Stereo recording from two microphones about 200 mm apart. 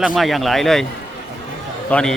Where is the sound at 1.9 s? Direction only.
5° left (ahead or behind).